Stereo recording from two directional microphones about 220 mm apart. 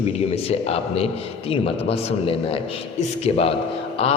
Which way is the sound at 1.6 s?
25° left (ahead or behind).